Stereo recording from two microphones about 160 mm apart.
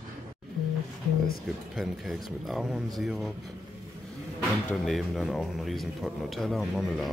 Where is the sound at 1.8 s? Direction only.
Centre (ahead or behind).